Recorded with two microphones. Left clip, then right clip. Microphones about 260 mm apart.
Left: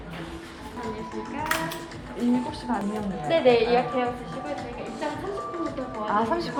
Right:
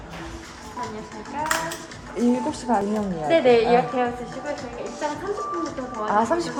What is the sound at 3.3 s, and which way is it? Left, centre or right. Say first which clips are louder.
Speech: right 3 dB; right.